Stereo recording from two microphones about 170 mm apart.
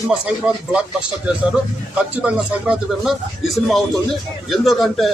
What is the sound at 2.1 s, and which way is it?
Speech, 5° right (ahead or behind).